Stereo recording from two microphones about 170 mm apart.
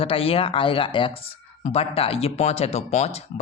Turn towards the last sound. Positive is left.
turn(degrees=40)  # may be behind; listen again after turning